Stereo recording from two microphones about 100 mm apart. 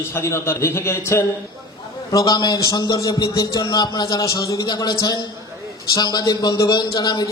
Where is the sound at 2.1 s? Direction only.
40° left (ahead or behind).